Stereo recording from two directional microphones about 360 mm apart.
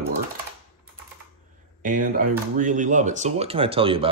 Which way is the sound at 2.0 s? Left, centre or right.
Right.